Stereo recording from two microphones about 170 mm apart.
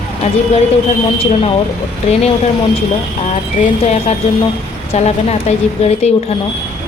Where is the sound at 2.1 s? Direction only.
40° left (ahead or behind).